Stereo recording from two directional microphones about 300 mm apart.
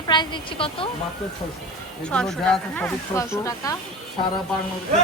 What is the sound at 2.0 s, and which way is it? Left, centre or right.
Speech, centre.